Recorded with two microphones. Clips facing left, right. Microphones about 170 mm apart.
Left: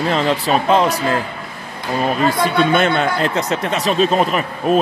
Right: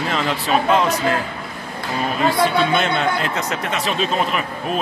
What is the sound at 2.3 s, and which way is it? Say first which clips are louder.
Speech: even; 50° left (ahead or behind).